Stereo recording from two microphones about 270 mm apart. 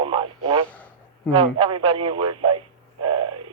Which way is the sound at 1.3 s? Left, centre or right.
Centre.